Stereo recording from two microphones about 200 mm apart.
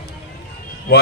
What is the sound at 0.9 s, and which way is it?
Speech, 55° left (ahead or behind).